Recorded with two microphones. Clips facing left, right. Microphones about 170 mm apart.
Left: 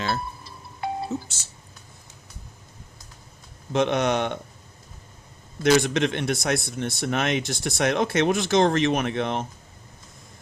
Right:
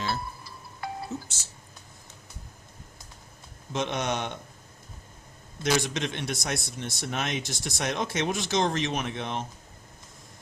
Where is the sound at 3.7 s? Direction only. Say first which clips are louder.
Left 7 dB; 60° left (ahead or behind).